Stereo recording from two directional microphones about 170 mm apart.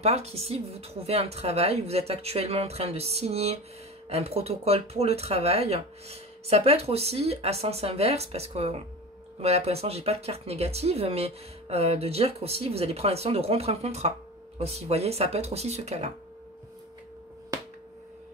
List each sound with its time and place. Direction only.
0.0 s speech: 40° right (ahead or behind)